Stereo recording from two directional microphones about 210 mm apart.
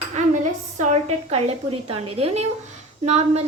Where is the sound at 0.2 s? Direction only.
35° right (ahead or behind).